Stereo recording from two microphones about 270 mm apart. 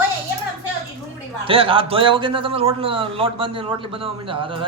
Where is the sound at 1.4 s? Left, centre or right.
Centre.